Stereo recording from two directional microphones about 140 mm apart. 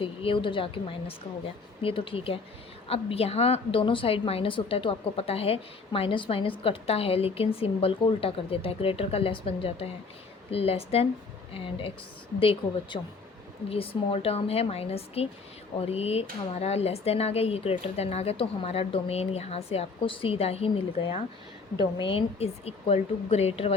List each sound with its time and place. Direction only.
0.0 s a woman's voice: 40° left (ahead or behind)